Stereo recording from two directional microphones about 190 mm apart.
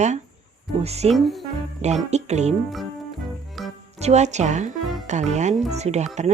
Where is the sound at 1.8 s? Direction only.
35° right (ahead or behind).